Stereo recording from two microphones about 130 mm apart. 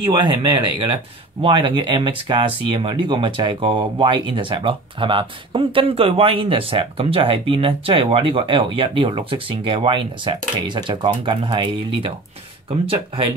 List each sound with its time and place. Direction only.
0.0 s speech: 40° right (ahead or behind)